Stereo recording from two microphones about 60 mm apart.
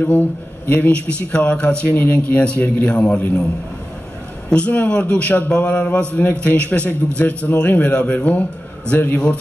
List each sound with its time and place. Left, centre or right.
0.7 s a man's voice: left
4.5 s a man's voice: centre